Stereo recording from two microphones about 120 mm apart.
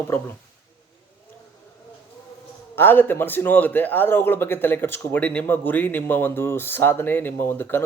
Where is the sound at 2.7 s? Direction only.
15° left (ahead or behind).